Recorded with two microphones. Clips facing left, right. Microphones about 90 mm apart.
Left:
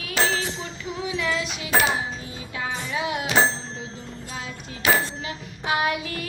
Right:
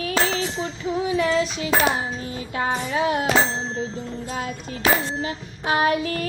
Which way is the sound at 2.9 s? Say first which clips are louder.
Right 5 dB; 40° right (ahead or behind).